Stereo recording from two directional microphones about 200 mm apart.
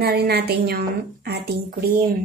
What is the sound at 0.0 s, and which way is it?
Speech, 55° right (ahead or behind).